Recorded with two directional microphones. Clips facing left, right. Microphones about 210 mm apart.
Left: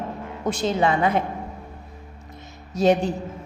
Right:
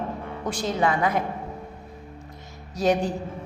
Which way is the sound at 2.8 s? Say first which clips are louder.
Left 3 dB; 25° left (ahead or behind).